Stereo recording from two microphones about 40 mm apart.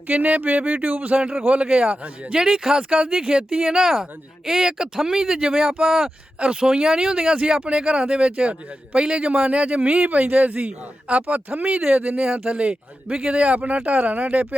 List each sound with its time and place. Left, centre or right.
0.1 s a man's voice: right
1.6 s a man's voice: right
2.3 s speech: centre
6.4 s a man's voice: right